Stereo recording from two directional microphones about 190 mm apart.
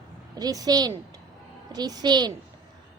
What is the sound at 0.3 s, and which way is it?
A woman's voice, 20° right (ahead or behind).